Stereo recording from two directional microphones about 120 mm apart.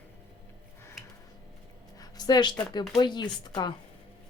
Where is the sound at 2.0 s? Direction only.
35° left (ahead or behind).